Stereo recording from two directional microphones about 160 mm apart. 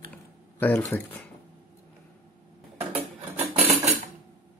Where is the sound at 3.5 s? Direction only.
40° right (ahead or behind).